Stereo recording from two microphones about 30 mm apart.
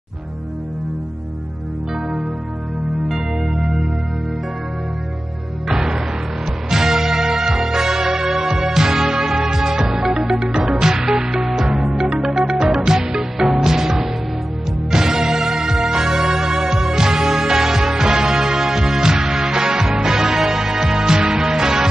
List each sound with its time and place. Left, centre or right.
3.1 s music: centre
5.7 s music: centre
10.1 s music: centre
10.6 s music: centre